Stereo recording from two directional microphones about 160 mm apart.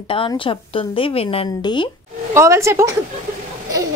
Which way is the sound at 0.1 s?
30° left (ahead or behind).